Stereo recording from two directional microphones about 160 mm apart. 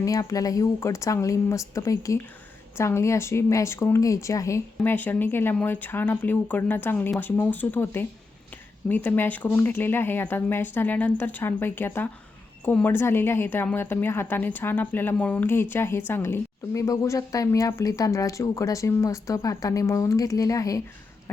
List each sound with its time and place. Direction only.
0.0 s a woman's voice: 20° left (ahead or behind)